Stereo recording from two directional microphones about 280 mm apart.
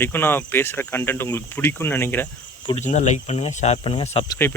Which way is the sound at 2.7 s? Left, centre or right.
Left.